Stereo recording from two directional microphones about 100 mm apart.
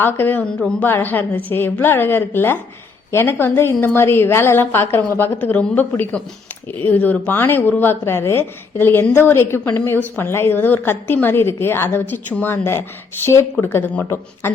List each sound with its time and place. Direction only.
0.0 s speech: 20° left (ahead or behind)